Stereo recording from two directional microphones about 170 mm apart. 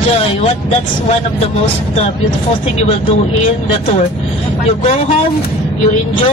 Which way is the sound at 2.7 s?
40° left (ahead or behind).